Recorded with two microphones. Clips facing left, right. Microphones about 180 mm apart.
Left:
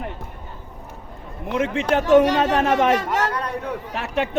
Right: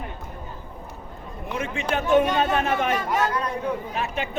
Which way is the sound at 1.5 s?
85° left.